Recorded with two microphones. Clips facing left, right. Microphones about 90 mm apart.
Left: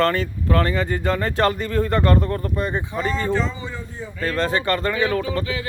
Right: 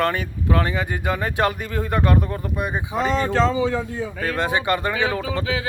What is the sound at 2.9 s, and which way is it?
A man's voice, 85° right.